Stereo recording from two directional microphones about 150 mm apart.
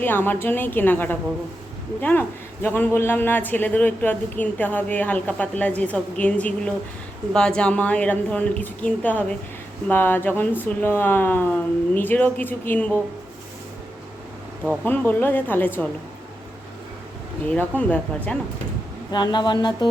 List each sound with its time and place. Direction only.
0.0 s a man's voice: 15° left (ahead or behind)
14.8 s a man's voice: 15° left (ahead or behind)
17.4 s a man's voice: 10° left (ahead or behind)
19.1 s speech: 30° left (ahead or behind)